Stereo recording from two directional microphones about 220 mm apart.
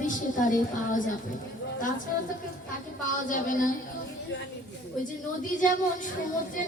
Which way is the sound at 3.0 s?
35° left (ahead or behind).